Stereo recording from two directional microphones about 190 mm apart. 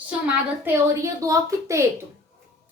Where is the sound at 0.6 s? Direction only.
15° right (ahead or behind).